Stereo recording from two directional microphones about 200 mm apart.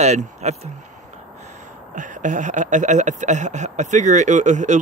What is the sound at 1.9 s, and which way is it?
Speech, 40° right (ahead or behind).